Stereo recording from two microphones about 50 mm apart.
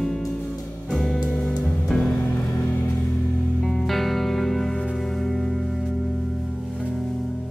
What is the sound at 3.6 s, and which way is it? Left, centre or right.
Music, centre.